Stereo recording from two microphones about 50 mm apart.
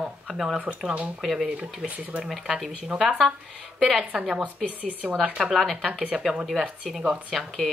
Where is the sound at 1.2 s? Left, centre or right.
Centre.